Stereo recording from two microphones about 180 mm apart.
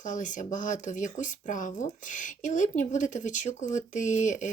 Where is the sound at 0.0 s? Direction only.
45° left (ahead or behind).